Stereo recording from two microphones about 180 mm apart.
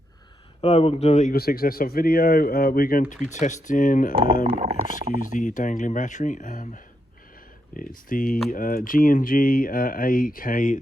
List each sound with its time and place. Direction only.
0.6 s speech: 35° left (ahead or behind)
1.3 s speech: 55° left (ahead or behind)
3.2 s speech: 40° left (ahead or behind)
4.5 s speech: 35° right (ahead or behind)
5.3 s speech: 45° left (ahead or behind)